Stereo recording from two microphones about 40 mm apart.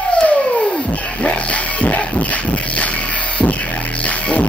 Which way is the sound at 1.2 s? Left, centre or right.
Left.